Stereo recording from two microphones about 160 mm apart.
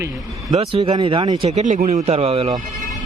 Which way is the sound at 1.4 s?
45° right (ahead or behind).